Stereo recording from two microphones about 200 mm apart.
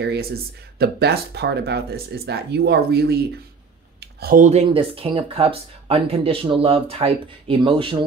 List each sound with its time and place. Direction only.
0.0 s speech: 55° right (ahead or behind)
4.0 s a sound: 50° right (ahead or behind)
4.5 s speech: 30° right (ahead or behind)